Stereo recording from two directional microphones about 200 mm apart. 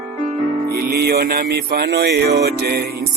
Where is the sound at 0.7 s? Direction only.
50° right (ahead or behind).